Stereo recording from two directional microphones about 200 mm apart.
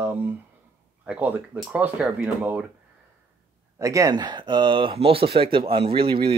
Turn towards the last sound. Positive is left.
turn(degrees=-30)  # may be behind; listen again after turning